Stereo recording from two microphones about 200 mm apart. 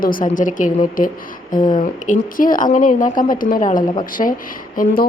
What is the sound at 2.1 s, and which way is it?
A woman's voice, 45° left (ahead or behind).